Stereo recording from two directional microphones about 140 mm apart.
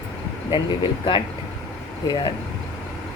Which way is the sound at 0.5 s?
35° left (ahead or behind).